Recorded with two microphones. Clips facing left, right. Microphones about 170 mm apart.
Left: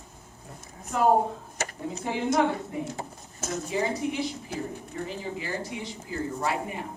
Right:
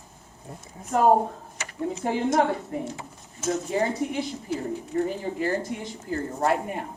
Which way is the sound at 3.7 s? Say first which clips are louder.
Right 2 dB; 50° right (ahead or behind).